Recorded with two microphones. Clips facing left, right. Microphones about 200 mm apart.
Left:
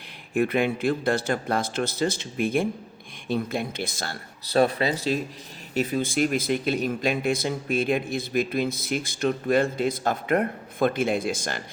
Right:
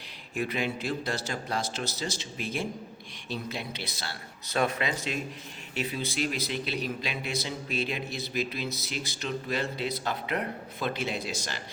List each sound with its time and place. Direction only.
0.3 s speech: 55° left (ahead or behind)
4.4 s speech: 35° left (ahead or behind); by 11.6 s 50° left (ahead or behind)